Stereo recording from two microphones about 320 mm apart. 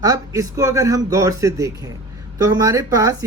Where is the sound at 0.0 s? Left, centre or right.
Centre.